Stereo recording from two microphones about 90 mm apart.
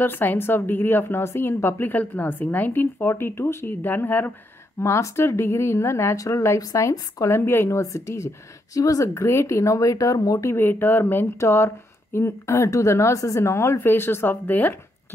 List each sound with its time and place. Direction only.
0.0 s speech: 20° left (ahead or behind)
4.7 s speech: 35° left (ahead or behind)
10.5 s speech: 25° left (ahead or behind)